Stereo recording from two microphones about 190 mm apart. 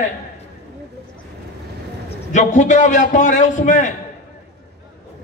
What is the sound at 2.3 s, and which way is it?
A man's voice, 40° left (ahead or behind).